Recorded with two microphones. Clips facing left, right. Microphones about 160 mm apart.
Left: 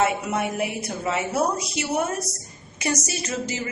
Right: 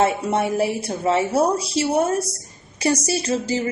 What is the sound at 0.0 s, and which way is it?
A woman's voice, 30° right (ahead or behind).